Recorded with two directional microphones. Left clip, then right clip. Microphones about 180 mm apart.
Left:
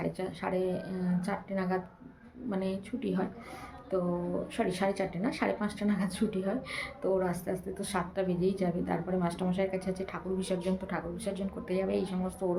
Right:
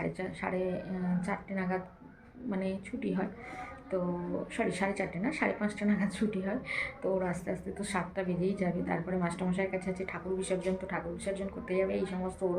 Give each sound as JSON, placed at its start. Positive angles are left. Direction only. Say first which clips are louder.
{"t": 0.0, "sound": "speech", "louder": "left 1 dB", "side_deg": 15}
{"t": 4.5, "sound": "speech", "louder": "left 1 dB", "side_deg": 15}